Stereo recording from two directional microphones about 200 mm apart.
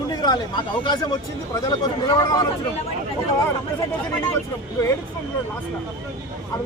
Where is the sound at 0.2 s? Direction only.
20° left (ahead or behind).